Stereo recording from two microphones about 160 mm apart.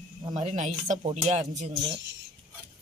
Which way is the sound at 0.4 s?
45° right (ahead or behind).